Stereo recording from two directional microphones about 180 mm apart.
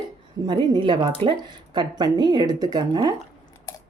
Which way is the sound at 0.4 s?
25° right (ahead or behind).